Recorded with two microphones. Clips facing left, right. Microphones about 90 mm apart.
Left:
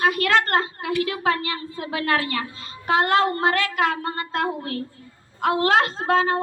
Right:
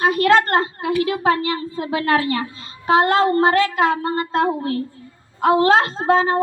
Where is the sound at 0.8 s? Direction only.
30° right (ahead or behind).